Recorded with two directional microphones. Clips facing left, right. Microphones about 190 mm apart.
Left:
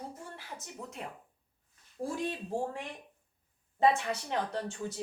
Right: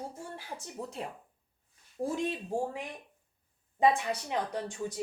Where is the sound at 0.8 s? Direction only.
30° right (ahead or behind).